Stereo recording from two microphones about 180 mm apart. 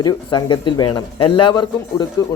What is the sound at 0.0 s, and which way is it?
Speech, 25° left (ahead or behind).